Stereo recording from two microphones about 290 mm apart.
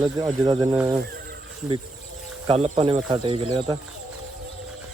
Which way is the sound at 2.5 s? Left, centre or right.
Right.